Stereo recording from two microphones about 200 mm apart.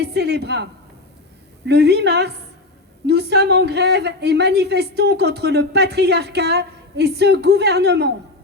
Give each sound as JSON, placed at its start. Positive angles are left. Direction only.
{"t": 0.0, "sound": "a woman's voice", "side_deg": -55}